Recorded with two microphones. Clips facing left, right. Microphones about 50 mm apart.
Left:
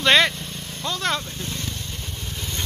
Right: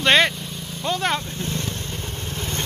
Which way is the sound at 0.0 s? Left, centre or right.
Centre.